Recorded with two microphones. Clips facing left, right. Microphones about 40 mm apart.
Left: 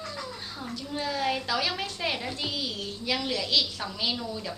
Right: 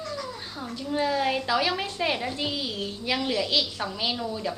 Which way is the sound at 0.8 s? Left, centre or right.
Centre.